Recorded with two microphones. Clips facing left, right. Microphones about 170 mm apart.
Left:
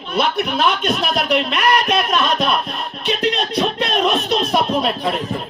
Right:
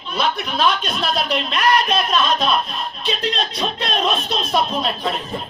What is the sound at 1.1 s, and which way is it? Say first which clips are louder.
Speech: left 3 dB; 65° left (ahead or behind).